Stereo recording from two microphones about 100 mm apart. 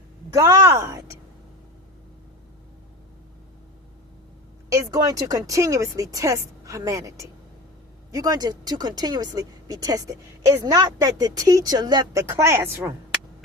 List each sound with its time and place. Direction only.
0.3 s speech: 30° right (ahead or behind)
4.7 s speech: 35° right (ahead or behind)
12.3 s speech: 25° right (ahead or behind)